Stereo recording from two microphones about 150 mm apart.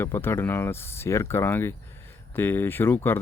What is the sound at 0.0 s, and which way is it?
Speech, 15° left (ahead or behind).